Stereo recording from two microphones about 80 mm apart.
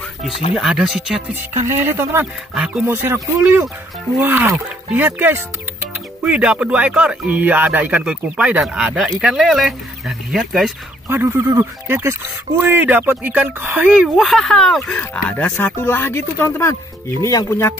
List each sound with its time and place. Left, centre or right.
0.2 s speech: centre
1.9 s speech: right
2.5 s speech: centre
2.9 s speech: right; by 10.7 s centre
11.1 s speech: right
14.0 s speech: centre
15.3 s speech: centre; by 17.6 s left